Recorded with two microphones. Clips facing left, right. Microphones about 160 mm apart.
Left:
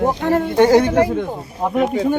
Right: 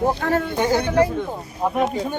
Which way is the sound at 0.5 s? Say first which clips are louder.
Left 7 dB; 85° left.